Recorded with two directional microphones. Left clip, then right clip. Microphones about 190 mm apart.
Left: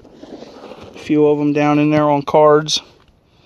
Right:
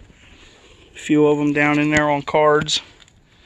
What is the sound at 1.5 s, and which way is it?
Speech, 40° left (ahead or behind).